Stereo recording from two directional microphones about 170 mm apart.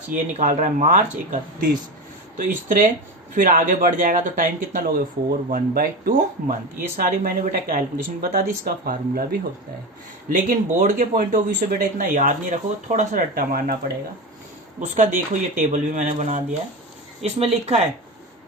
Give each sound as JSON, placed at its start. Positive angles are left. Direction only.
{"t": 0.3, "sound": "speech", "side_deg": -45}
{"t": 2.4, "sound": "speech", "side_deg": -55}
{"t": 10.2, "sound": "speech", "side_deg": -50}
{"t": 14.8, "sound": "speech", "side_deg": -45}